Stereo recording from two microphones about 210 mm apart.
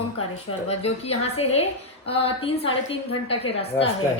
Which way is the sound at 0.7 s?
30° left (ahead or behind).